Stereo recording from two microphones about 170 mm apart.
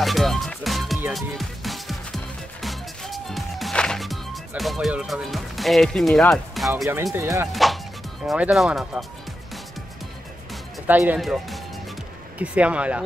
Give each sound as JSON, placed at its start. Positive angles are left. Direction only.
{"t": 0.0, "sound": "music", "side_deg": 0}
{"t": 7.2, "sound": "speech", "side_deg": -15}
{"t": 7.4, "sound": "speech", "side_deg": 0}
{"t": 10.9, "sound": "speech", "side_deg": -10}